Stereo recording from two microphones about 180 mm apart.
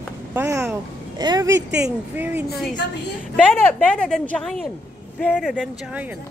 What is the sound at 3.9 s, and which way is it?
Speech, 5° left (ahead or behind).